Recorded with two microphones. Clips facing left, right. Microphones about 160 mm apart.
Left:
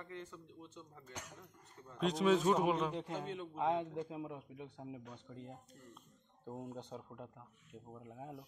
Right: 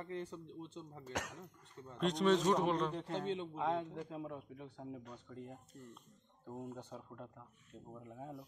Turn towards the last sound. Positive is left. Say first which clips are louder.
# left 1 dB
turn(degrees=15)  # may be behind; listen again after turning